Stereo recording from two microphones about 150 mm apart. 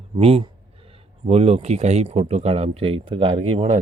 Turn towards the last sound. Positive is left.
turn(degrees=-40)  # may be behind; listen again after turning